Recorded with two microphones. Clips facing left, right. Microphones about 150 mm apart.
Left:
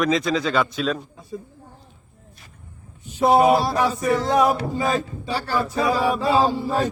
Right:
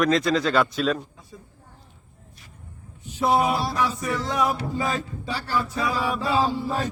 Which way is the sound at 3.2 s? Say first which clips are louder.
Left 6 dB; 55° left (ahead or behind).